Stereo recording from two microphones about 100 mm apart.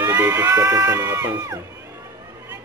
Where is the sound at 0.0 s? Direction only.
35° right (ahead or behind).